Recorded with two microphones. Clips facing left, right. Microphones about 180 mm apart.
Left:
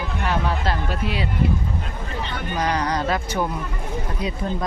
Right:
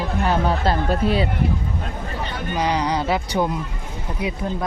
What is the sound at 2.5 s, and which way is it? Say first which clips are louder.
Speech: right 2 dB; 10° right (ahead or behind).